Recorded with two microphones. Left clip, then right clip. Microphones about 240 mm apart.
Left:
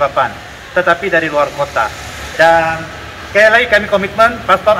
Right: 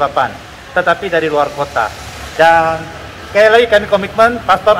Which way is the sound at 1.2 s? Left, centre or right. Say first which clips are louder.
Even; right.